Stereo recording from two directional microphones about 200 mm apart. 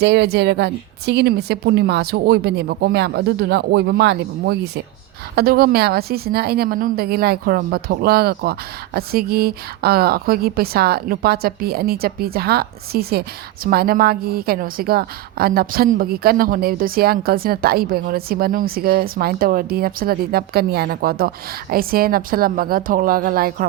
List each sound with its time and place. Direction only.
0.0 s a woman's voice: 55° right (ahead or behind)